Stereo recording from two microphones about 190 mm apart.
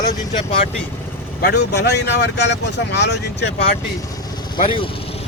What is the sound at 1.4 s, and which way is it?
Speech, 60° left (ahead or behind).